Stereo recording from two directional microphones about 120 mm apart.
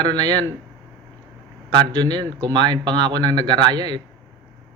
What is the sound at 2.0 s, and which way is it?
Speech, 35° right (ahead or behind).